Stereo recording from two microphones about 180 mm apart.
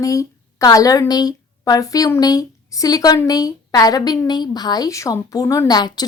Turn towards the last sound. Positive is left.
turn(degrees=20)  # may be behind; listen again after turning